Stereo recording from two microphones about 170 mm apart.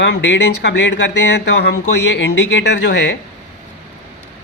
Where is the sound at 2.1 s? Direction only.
90° left.